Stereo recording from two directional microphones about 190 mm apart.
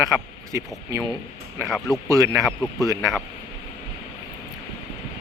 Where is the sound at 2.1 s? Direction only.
15° right (ahead or behind).